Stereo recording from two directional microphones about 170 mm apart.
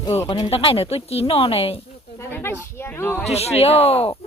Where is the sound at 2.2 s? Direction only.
15° left (ahead or behind).